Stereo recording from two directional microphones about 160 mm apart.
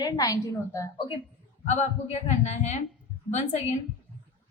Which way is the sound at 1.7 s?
45° left (ahead or behind).